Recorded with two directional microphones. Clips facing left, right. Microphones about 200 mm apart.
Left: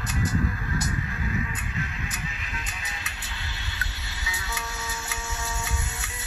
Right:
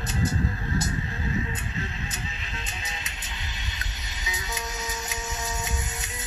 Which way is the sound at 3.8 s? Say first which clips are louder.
Left 1 dB; 20° right (ahead or behind).